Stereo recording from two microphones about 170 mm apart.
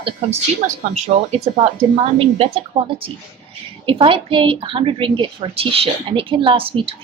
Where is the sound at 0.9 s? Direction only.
40° right (ahead or behind).